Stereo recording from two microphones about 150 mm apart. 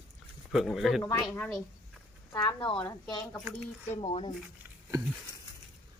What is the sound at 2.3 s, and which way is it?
Speech, 25° left (ahead or behind).